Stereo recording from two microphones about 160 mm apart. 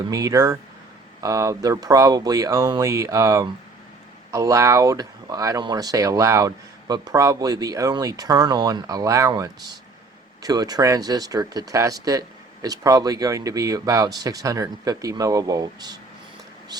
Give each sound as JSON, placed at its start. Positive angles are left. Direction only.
{"t": 0.1, "sound": "speech", "side_deg": -20}